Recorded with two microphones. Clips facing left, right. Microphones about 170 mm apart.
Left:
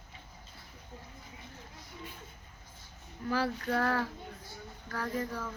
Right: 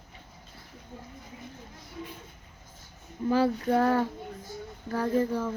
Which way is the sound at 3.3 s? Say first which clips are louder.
Right 7 dB; 20° right (ahead or behind).